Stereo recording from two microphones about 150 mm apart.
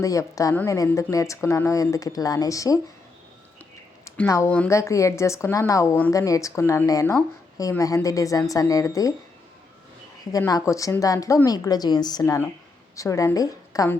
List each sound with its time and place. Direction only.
0.0 s a woman's voice: 20° left (ahead or behind)
4.3 s a woman's voice: 20° left (ahead or behind)
10.3 s a woman's voice: 20° left (ahead or behind)